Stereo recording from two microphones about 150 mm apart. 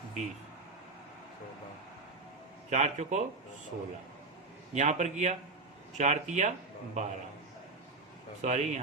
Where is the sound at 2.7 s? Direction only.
50° right (ahead or behind).